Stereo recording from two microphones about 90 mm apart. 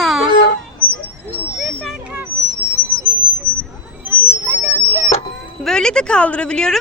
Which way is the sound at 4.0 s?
25° right (ahead or behind).